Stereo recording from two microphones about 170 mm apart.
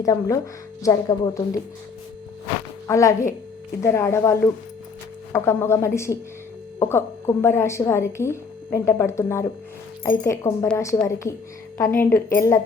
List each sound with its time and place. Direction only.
0.0 s speech: 20° left (ahead or behind)
2.8 s a woman's voice: 20° left (ahead or behind)